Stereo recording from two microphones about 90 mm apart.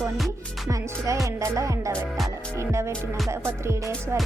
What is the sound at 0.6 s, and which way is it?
Music, 40° right (ahead or behind).